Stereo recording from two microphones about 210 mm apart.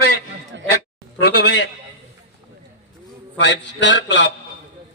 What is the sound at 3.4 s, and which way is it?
Speech, 60° left (ahead or behind).